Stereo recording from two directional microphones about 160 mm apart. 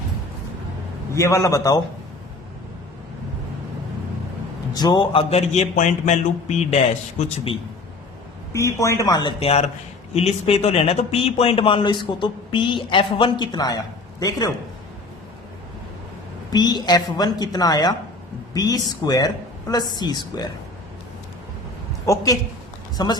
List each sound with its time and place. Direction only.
1.1 s speech: 20° left (ahead or behind)
4.7 s a man's voice: 25° left (ahead or behind); by 6.7 s 45° left (ahead or behind)
8.5 s speech: 20° left (ahead or behind)
9.4 s speech: 40° left (ahead or behind); by 14.5 s 20° left (ahead or behind)
16.5 s speech: 25° left (ahead or behind)
22.0 s a woman's voice: 20° left (ahead or behind)